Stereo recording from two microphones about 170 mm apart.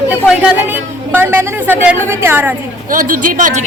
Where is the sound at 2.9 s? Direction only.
55° right (ahead or behind).